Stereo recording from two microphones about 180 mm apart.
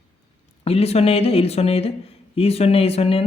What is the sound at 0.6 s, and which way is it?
A man's voice, 35° left (ahead or behind).